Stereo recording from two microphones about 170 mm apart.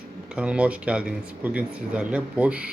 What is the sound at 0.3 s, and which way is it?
Speech, 5° right (ahead or behind).